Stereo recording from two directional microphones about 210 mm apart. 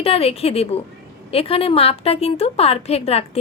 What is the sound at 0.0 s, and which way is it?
A woman's voice, 30° left (ahead or behind).